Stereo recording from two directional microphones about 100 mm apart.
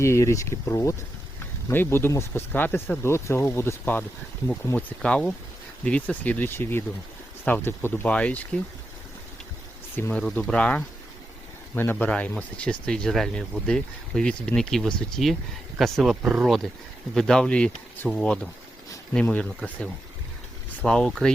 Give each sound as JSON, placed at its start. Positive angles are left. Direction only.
{"t": 0.0, "sound": "speech", "side_deg": 30}
{"t": 9.9, "sound": "speech", "side_deg": 20}
{"t": 17.2, "sound": "speech", "side_deg": 5}